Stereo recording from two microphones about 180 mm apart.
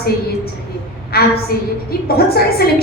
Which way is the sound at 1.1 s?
60° left (ahead or behind).